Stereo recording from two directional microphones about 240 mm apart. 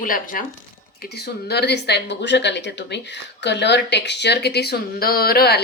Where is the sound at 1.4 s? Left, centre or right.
Left.